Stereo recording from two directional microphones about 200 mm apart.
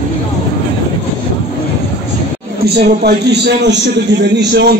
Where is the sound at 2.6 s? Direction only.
55° right (ahead or behind).